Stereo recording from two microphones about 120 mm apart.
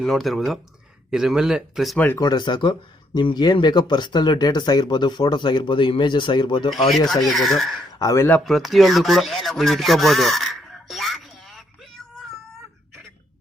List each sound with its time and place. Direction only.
0.0 s speech: centre (ahead or behind)
2.0 s speech: 15° left (ahead or behind)
2.2 s speech: 40° left (ahead or behind)
6.7 s speech: centre (ahead or behind)
7.9 s speech: 25° left (ahead or behind)
8.4 s a sound: centre (ahead or behind)